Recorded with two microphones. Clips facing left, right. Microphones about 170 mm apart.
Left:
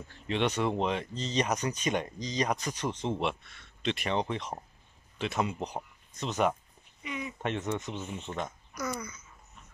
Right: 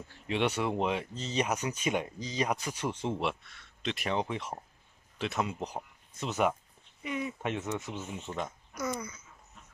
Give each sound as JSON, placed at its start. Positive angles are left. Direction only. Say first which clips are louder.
{"t": 0.1, "sound": "speech", "louder": "even", "side_deg": -10}
{"t": 8.7, "sound": "speech", "louder": "right 1 dB", "side_deg": -25}